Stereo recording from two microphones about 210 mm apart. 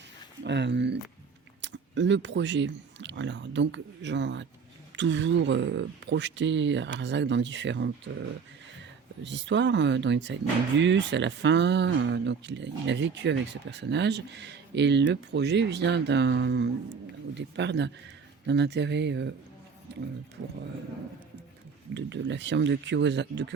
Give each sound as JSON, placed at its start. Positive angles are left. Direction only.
{"t": 0.4, "sound": "speech", "side_deg": -55}
{"t": 9.2, "sound": "speech", "side_deg": -60}
{"t": 21.9, "sound": "speech", "side_deg": -55}